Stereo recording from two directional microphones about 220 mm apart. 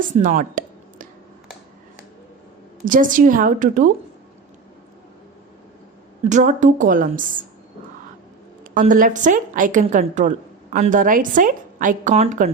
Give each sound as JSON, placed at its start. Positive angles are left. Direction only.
{"t": 0.2, "sound": "a sound", "side_deg": -35}
{"t": 2.8, "sound": "a woman's voice", "side_deg": -40}
{"t": 6.2, "sound": "a woman's voice", "side_deg": -35}
{"t": 8.7, "sound": "a woman's voice", "side_deg": -35}